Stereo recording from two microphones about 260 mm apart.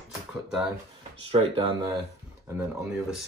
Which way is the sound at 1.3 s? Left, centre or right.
Right.